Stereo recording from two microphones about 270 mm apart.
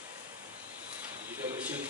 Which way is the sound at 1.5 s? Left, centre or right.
Centre.